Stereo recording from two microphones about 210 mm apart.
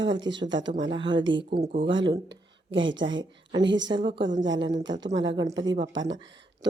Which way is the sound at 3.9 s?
20° right (ahead or behind).